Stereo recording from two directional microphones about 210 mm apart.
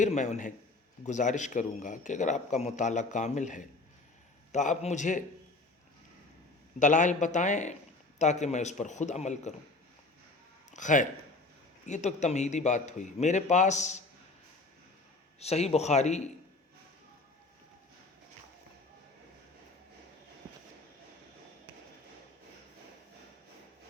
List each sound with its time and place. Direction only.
0.0 s a man's voice: 35° left (ahead or behind)
6.7 s a man's voice: 35° left (ahead or behind)
10.7 s a man's voice: 35° left (ahead or behind)
15.4 s a man's voice: 30° left (ahead or behind)